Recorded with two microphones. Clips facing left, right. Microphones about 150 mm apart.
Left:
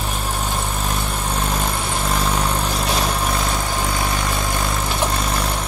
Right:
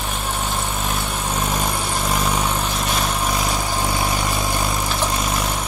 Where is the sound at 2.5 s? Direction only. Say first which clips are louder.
Left 1 dB; 10° left (ahead or behind).